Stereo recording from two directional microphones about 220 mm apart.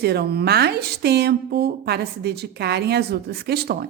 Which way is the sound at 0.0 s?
45° right (ahead or behind).